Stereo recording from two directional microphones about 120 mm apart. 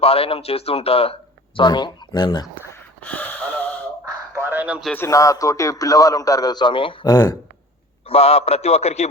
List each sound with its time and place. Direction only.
0.0 s speech: 55° left (ahead or behind)
1.5 s speech: 40° left (ahead or behind)
3.0 s wheeze: 15° left (ahead or behind)
4.4 s a sound: 15° right (ahead or behind)
4.9 s speech: 25° left (ahead or behind)
8.0 s speech: 55° left (ahead or behind)